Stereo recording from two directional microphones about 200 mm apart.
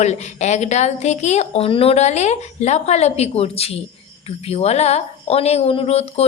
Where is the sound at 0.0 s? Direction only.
35° left (ahead or behind).